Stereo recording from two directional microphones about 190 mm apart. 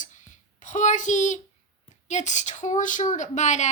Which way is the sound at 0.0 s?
40° left (ahead or behind).